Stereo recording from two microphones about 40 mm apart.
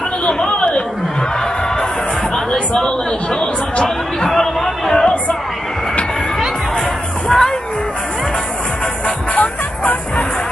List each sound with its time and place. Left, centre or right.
0.3 s chatter: left
2.3 s a sound: centre
3.3 s chatter: left
4.3 s a sound: centre
7.2 s music: centre
9.3 s music: left